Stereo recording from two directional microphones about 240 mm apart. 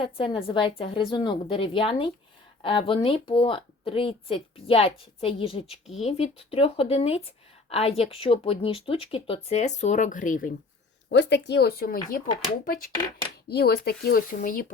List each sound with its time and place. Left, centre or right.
0.0 s speech: left
11.1 s speech: left
13.5 s speech: left